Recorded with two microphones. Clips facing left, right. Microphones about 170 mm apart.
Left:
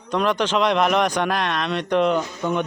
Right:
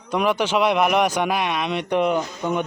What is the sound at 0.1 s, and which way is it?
Speech, 10° right (ahead or behind).